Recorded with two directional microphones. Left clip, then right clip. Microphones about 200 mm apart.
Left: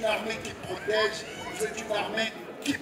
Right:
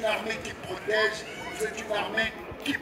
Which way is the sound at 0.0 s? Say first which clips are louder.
Even; 60° left (ahead or behind).